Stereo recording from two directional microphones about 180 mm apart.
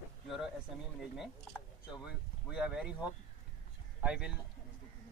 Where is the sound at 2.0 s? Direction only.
5° right (ahead or behind).